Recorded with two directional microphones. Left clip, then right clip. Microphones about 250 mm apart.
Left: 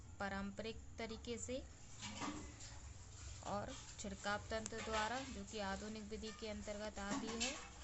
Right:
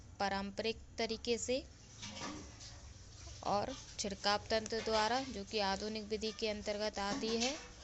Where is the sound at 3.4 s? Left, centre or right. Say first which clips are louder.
Right 10 dB; right.